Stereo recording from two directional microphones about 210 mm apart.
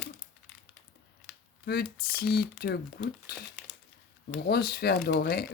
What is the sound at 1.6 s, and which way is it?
Speech, 45° left (ahead or behind).